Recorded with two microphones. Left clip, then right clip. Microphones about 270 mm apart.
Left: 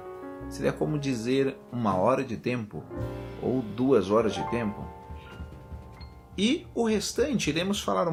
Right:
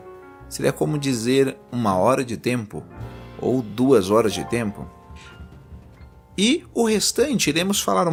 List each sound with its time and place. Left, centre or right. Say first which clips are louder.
0.5 s speech: right 6 dB; right
6.3 s speech: right 7 dB; right